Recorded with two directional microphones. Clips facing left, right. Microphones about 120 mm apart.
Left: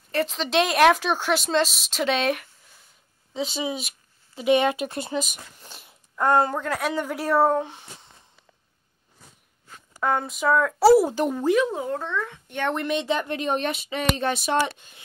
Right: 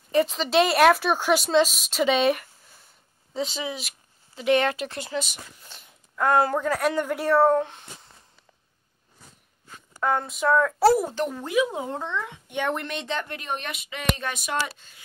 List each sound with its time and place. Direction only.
0.1 s a woman's voice: 5° right (ahead or behind)
3.5 s speech: 20° left (ahead or behind)
5.7 s a sound: 10° left (ahead or behind)
6.3 s a woman's voice: 5° right (ahead or behind)
9.9 s a woman's voice: centre (ahead or behind)
11.4 s speech: 5° right (ahead or behind)
11.7 s speech: 20° right (ahead or behind)
12.7 s a woman's voice: centre (ahead or behind)
13.2 s speech: 20° left (ahead or behind)